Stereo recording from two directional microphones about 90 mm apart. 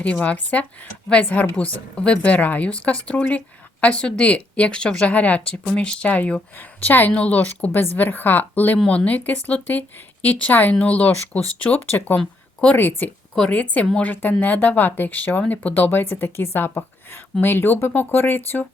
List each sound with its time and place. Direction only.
0.0 s a woman's voice: 15° left (ahead or behind)
12.2 s a sound: 10° left (ahead or behind)
12.7 s a woman's voice: 20° left (ahead or behind)